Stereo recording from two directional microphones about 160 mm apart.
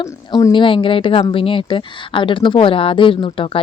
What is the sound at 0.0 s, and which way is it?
Speech, 20° left (ahead or behind).